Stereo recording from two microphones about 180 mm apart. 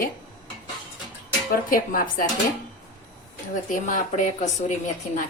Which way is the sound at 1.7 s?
50° left (ahead or behind).